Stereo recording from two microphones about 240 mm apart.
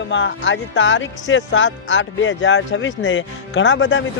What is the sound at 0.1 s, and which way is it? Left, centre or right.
Speech, left.